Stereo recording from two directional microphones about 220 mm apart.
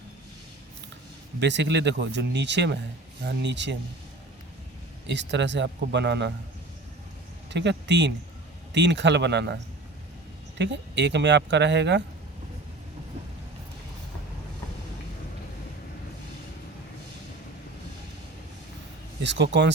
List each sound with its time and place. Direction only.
1.4 s speech: 50° right (ahead or behind)
5.0 s speech: 50° right (ahead or behind)
7.5 s speech: 55° right (ahead or behind)
10.6 s speech: 55° right (ahead or behind)
19.2 s speech: 55° right (ahead or behind)